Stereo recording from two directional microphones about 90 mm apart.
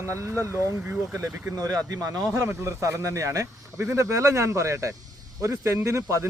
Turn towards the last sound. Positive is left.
turn(degrees=-30)  # may be behind; listen again after turning